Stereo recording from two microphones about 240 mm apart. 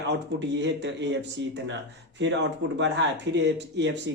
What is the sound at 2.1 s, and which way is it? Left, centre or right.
Speech, right.